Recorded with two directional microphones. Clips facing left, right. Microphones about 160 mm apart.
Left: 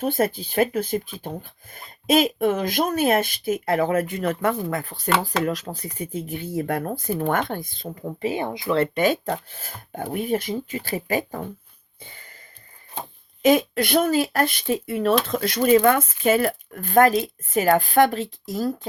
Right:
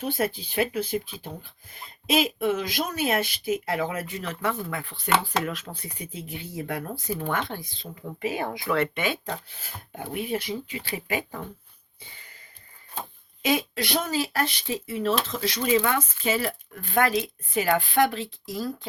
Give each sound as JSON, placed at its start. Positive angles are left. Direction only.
{"t": 0.0, "sound": "speech", "side_deg": 50}
{"t": 8.8, "sound": "speech", "side_deg": 40}
{"t": 13.4, "sound": "speech", "side_deg": 50}